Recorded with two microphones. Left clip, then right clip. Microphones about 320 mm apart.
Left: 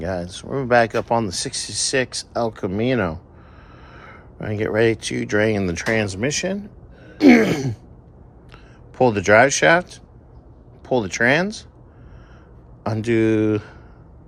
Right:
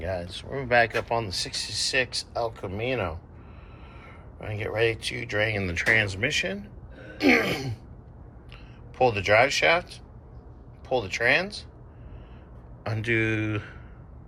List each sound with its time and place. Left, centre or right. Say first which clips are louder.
0.0 s speech: left 5 dB; left
4.4 s speech: left 7 dB; left
7.2 s gasp: left 8 dB; left
7.4 s speech: left 7 dB; left
9.0 s speech: left 6 dB; left
10.8 s speech: left 5 dB; left
12.8 s speech: left 6 dB; centre